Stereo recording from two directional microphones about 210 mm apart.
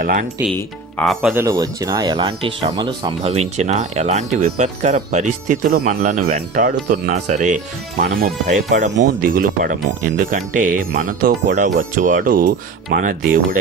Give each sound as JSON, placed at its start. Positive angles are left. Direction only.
{"t": 0.0, "sound": "speech", "side_deg": -40}
{"t": 0.9, "sound": "speech", "side_deg": 0}
{"t": 1.4, "sound": "speech", "side_deg": -15}